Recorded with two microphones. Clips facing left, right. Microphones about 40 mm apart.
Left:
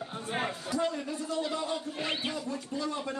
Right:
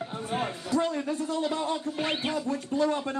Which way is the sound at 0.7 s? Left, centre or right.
Right.